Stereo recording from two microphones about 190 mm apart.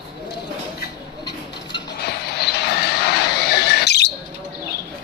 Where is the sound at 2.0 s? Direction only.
60° left (ahead or behind).